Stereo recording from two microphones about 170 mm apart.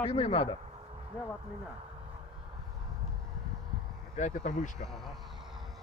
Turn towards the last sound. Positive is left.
turn(degrees=50)  # may be behind; listen again after turning